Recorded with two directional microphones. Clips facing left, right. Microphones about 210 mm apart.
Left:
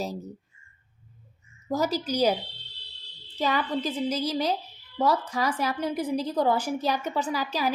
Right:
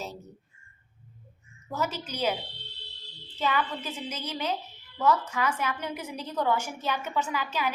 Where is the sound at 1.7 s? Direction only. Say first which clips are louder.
Left 6 dB; 35° left (ahead or behind).